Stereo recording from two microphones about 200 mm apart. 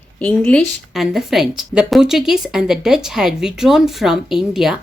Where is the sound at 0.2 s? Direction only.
5° left (ahead or behind).